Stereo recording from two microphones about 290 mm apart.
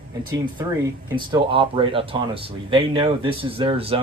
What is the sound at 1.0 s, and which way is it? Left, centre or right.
Speech, centre.